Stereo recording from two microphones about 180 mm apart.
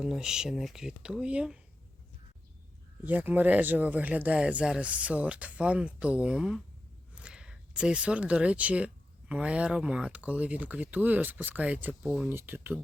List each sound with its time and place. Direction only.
0.0 s speech: 5° right (ahead or behind)
3.0 s speech: 10° right (ahead or behind)